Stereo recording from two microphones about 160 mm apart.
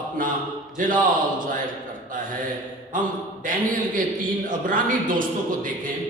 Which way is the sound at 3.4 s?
55° right (ahead or behind).